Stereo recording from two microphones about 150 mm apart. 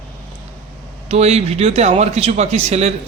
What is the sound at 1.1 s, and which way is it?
A man's voice, 45° right (ahead or behind).